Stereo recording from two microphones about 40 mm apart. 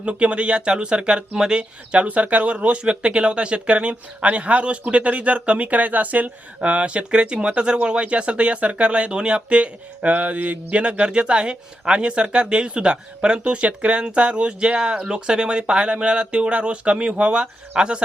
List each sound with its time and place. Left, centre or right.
0.0 s speech: right
2.0 s speech: right